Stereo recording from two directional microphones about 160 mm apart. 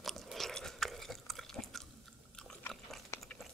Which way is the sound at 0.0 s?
Centre (ahead or behind).